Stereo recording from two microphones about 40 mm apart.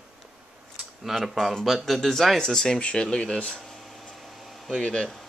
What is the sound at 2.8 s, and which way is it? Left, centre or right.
Speech, left.